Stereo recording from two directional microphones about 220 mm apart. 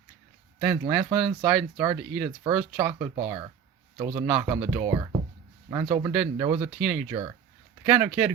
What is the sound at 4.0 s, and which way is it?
Speech, 25° right (ahead or behind).